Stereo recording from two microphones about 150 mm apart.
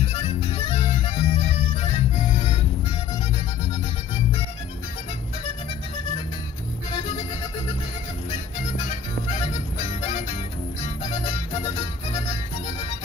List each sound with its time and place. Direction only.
0.0 s music: 40° left (ahead or behind)
8.8 s music: 50° left (ahead or behind)
11.2 s music: 45° left (ahead or behind)